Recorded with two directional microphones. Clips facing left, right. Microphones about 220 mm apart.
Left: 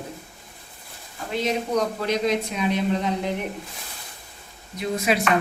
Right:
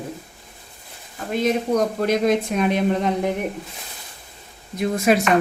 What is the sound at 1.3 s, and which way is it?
Speech, 50° right (ahead or behind).